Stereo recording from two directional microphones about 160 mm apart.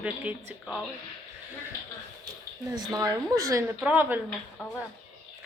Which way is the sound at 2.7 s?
20° right (ahead or behind).